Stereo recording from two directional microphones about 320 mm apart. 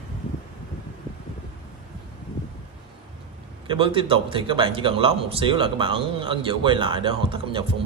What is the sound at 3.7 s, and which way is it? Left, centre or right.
A man's voice, centre.